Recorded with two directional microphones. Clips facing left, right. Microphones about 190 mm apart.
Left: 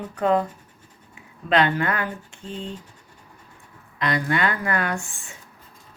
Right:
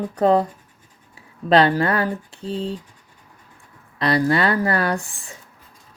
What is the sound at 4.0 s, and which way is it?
Speech, 35° right (ahead or behind).